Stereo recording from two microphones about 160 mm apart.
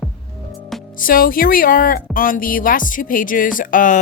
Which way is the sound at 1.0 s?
60° left (ahead or behind).